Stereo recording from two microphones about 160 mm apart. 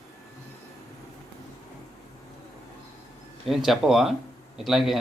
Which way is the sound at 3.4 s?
Centre (ahead or behind).